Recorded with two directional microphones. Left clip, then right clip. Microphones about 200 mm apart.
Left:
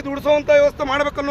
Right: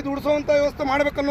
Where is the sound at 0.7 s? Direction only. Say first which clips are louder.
Left 1 dB; 5° left (ahead or behind).